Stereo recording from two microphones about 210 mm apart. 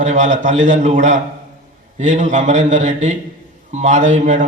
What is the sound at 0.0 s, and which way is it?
A man's voice, 35° right (ahead or behind).